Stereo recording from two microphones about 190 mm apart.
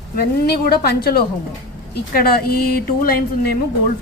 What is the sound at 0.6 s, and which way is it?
Speech, 55° left (ahead or behind).